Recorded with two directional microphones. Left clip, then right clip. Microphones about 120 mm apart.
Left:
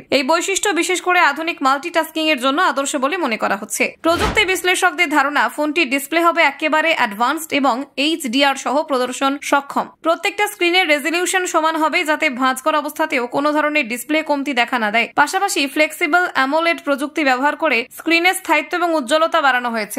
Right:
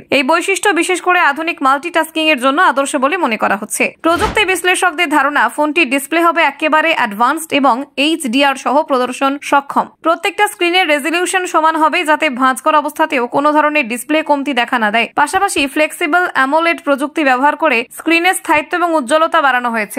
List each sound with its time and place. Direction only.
0.1 s a woman's voice: 30° right (ahead or behind)